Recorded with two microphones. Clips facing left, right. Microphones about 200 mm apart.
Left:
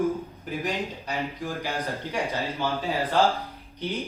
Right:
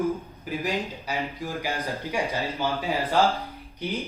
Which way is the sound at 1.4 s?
15° right (ahead or behind).